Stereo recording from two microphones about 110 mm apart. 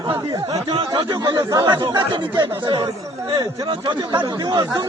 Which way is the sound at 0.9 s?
45° right (ahead or behind).